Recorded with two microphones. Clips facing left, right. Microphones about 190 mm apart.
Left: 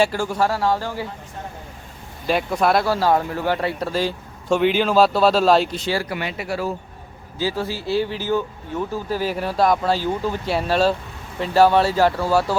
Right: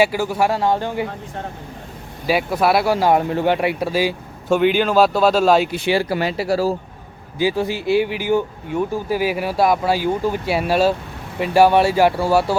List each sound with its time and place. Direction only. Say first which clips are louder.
0.0 s speech: right 2 dB; 10° right (ahead or behind)
2.2 s speech: right 2 dB; 5° right (ahead or behind)
5.8 s speech: right 5 dB; 20° right (ahead or behind)
6.1 s speech: right 7 dB; 35° right (ahead or behind)
7.3 s speech: right 5 dB; 15° right (ahead or behind)